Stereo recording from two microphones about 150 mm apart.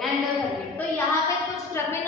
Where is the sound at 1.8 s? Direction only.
20° left (ahead or behind).